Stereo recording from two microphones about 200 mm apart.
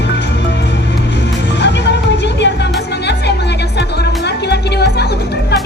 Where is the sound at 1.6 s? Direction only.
60° left (ahead or behind).